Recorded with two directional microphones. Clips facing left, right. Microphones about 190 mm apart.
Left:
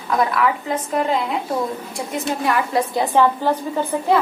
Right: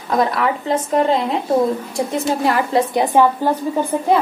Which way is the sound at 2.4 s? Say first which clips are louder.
Right 2 dB; 30° right (ahead or behind).